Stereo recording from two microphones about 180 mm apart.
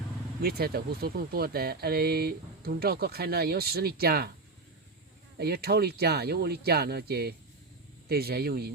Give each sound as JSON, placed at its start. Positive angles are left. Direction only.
{"t": 0.4, "sound": "speech", "side_deg": -60}
{"t": 5.4, "sound": "speech", "side_deg": -60}